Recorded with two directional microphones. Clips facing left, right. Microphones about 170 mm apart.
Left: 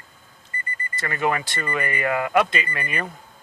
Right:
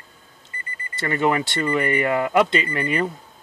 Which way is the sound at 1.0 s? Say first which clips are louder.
Right 4 dB; 25° right (ahead or behind).